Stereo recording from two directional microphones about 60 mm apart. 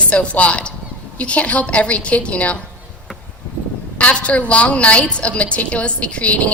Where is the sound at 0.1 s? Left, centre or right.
Left.